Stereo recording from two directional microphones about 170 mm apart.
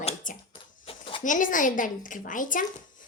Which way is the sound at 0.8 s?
30° left (ahead or behind).